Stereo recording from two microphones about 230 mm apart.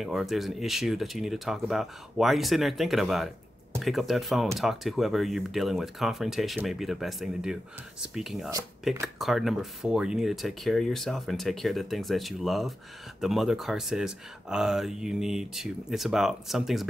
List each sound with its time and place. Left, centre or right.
0.0 s speech: centre